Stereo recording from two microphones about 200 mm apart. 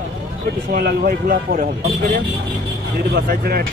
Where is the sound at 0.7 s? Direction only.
50° right (ahead or behind).